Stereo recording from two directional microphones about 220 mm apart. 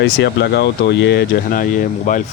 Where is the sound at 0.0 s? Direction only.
50° left (ahead or behind).